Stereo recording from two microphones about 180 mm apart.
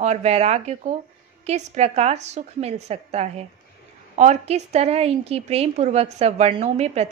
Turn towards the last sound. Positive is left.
turn(degrees=-35)  # may be behind; listen again after turning